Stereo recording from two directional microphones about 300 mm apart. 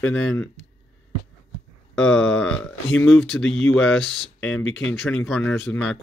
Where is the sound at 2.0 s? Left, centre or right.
Centre.